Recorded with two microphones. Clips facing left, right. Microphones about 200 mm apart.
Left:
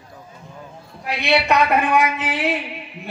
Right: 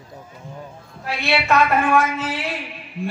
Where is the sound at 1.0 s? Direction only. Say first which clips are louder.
Left 2 dB; 15° left (ahead or behind).